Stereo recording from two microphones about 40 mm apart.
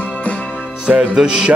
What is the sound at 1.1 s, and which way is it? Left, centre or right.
Music, centre.